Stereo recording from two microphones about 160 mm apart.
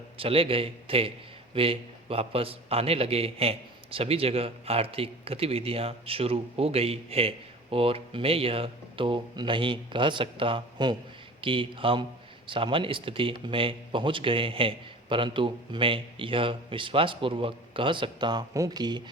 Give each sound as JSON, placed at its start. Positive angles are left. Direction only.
{"t": 0.2, "sound": "a man's voice", "side_deg": -35}